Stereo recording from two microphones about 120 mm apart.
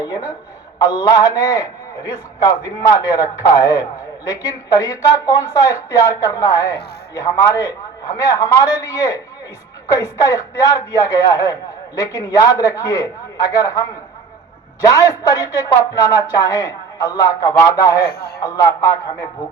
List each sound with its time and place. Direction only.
0.0 s a sound: 30° left (ahead or behind)
0.8 s speech: 30° left (ahead or behind)
14.9 s speech: 25° left (ahead or behind)